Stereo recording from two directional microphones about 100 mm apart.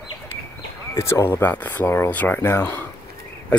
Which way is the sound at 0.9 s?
30° left (ahead or behind).